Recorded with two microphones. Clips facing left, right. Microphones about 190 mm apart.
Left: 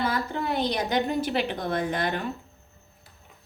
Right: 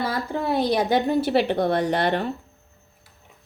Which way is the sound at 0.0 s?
30° right (ahead or behind).